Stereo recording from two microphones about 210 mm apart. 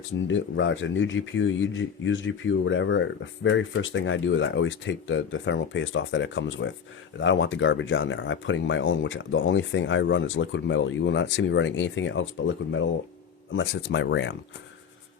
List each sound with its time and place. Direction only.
0.3 s speech: 60° left (ahead or behind)